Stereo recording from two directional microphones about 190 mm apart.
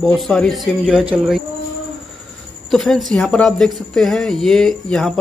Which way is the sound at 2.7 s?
Centre (ahead or behind).